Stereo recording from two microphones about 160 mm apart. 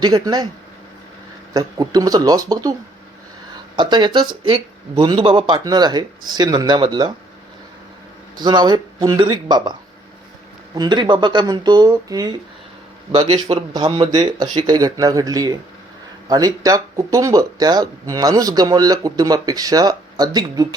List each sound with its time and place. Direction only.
0.0 s speech: 25° right (ahead or behind)
1.5 s speech: 25° right (ahead or behind)
3.8 s speech: 30° right (ahead or behind)
5.5 s speech: 25° right (ahead or behind)
8.4 s speech: 25° right (ahead or behind)
10.8 s speech: 25° right (ahead or behind)